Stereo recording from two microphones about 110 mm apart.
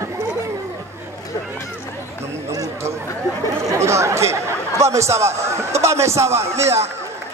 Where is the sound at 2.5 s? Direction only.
30° right (ahead or behind).